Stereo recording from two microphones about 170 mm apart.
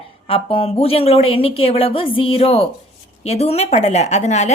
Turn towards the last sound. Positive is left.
turn(degrees=40)  # may be behind; listen again after turning